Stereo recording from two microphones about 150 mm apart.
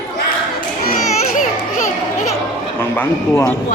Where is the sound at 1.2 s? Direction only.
60° left (ahead or behind).